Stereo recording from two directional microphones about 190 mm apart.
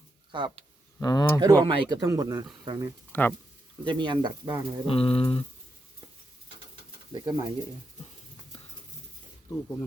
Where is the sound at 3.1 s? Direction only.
10° left (ahead or behind).